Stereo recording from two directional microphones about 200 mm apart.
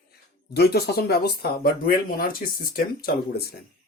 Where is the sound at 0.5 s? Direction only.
55° left (ahead or behind).